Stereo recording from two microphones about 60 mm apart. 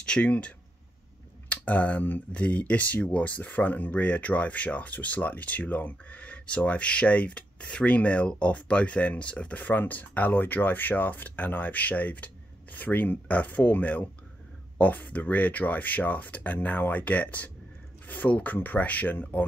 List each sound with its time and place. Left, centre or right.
0.0 s speech: centre